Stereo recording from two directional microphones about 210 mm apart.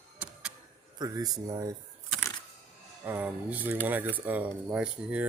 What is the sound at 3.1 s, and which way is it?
Speech, 10° right (ahead or behind).